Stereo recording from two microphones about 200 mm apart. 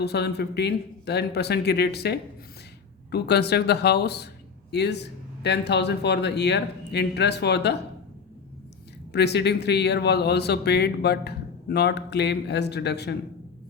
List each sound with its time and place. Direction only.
0.0 s speech: 55° left (ahead or behind)
9.1 s speech: 55° left (ahead or behind)